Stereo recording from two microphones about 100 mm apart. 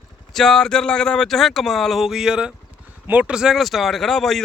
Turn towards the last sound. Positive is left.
turn(degrees=5)  # may be behind; listen again after turning